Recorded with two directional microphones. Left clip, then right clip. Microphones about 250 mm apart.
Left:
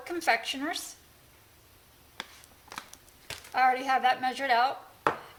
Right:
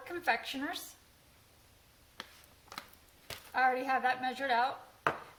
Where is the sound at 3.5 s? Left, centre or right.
Left.